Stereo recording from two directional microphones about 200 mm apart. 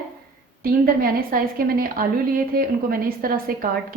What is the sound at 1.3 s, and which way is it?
A woman's voice, 45° right (ahead or behind).